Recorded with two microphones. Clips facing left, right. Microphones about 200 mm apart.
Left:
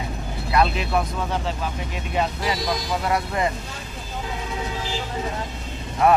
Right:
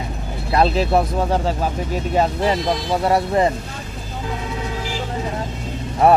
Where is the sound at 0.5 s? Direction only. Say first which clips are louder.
Right 5 dB; 35° right (ahead or behind).